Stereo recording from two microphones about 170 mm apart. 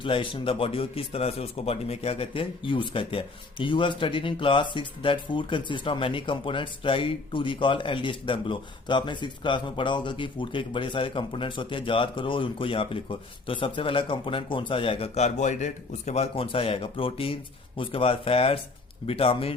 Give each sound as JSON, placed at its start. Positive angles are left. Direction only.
{"t": 0.0, "sound": "speech", "side_deg": 30}